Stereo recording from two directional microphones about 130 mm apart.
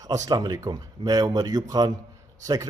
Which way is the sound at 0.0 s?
25° right (ahead or behind).